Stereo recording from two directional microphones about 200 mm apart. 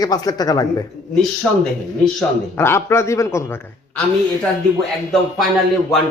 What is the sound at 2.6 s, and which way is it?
Speech, 10° left (ahead or behind).